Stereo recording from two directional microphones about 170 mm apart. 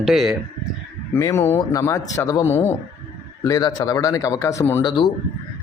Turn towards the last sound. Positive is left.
turn(degrees=25)  # may be behind; listen again after turning